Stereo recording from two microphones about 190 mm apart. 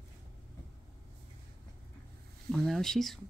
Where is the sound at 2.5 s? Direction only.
Centre (ahead or behind).